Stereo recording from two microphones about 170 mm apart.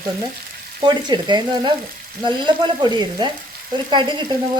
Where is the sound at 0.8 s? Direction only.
25° right (ahead or behind).